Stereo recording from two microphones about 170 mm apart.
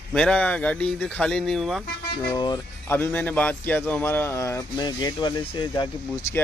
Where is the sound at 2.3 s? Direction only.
25° left (ahead or behind).